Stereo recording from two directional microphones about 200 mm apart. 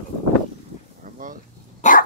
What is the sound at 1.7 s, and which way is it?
Dog, 40° left (ahead or behind).